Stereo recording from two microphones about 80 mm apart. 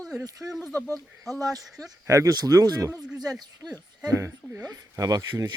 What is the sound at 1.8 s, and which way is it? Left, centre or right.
Speech, right.